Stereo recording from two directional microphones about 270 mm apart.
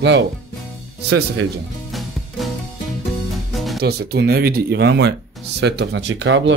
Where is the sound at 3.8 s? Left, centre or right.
Right.